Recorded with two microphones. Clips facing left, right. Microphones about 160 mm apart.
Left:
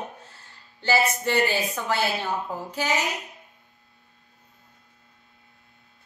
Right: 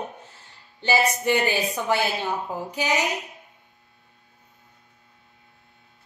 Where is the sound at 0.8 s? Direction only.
15° right (ahead or behind).